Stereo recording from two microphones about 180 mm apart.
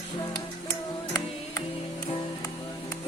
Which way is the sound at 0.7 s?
15° left (ahead or behind).